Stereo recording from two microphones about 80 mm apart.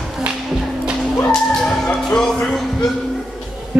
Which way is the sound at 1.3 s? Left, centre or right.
Centre.